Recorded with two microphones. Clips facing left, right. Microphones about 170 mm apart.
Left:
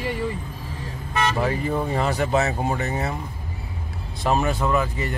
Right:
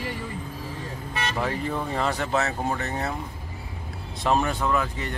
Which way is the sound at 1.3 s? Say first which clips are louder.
Left 4 dB; 5° left (ahead or behind).